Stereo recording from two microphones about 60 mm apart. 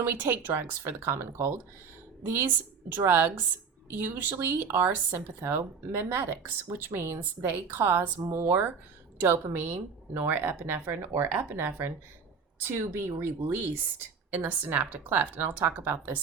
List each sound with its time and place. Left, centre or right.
0.0 s a woman's voice: right